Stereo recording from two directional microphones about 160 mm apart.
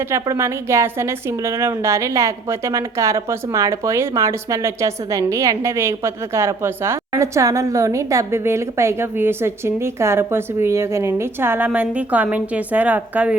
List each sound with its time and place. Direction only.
0.1 s a woman's voice: 15° right (ahead or behind)